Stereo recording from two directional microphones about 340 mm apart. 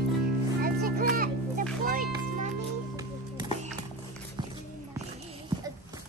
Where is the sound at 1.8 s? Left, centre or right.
Right.